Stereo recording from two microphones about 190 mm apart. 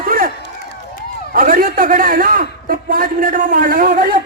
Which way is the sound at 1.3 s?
45° right (ahead or behind).